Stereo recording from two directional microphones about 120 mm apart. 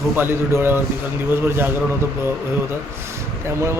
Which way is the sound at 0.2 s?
20° right (ahead or behind).